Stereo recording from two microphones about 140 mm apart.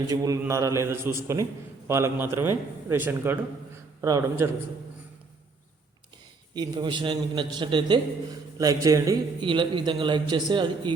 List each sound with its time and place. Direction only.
0.1 s a man's voice: 25° right (ahead or behind)
4.0 s a man's voice: 25° right (ahead or behind)
6.5 s a man's voice: 30° right (ahead or behind)
9.5 s a man's voice: 35° right (ahead or behind)